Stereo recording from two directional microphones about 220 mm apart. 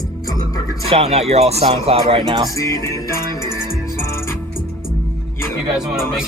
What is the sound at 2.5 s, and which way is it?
Music, 15° left (ahead or behind).